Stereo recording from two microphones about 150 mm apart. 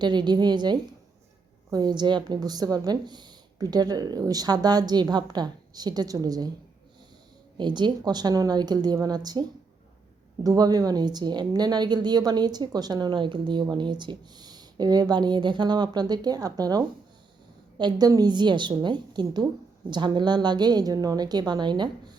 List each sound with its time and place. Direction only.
0.0 s a woman's voice: 30° right (ahead or behind)
7.6 s a woman's voice: 30° right (ahead or behind)